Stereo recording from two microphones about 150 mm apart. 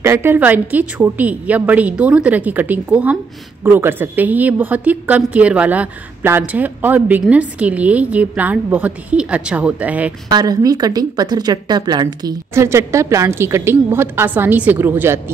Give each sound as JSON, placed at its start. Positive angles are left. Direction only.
{"t": 0.0, "sound": "a woman's voice", "side_deg": -15}
{"t": 10.3, "sound": "speech", "side_deg": -25}